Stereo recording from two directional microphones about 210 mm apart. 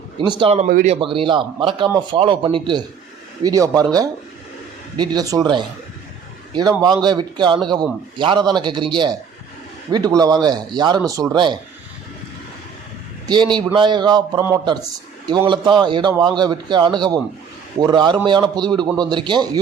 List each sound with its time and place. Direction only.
0.2 s speech: 20° right (ahead or behind); by 0.9 s 35° right (ahead or behind)
0.9 s speech: 25° right (ahead or behind)
13.2 s speech: 20° right (ahead or behind)